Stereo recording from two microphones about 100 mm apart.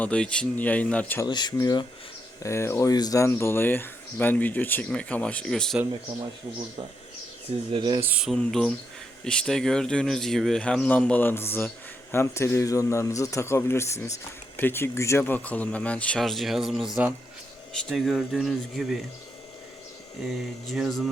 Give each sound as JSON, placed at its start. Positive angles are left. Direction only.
{"t": 0.0, "sound": "speech", "side_deg": 10}
{"t": 1.2, "sound": "speech", "side_deg": 45}
{"t": 2.4, "sound": "speech", "side_deg": 30}
{"t": 2.9, "sound": "speech", "side_deg": 40}
{"t": 7.7, "sound": "speech", "side_deg": -50}
{"t": 8.4, "sound": "a man's voice", "side_deg": 5}
{"t": 20.2, "sound": "a man's voice", "side_deg": 0}